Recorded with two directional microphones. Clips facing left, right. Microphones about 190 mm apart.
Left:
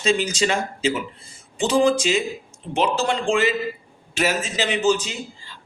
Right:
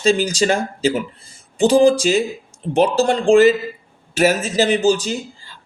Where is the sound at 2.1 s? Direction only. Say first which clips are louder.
Right 5 dB; 45° right (ahead or behind).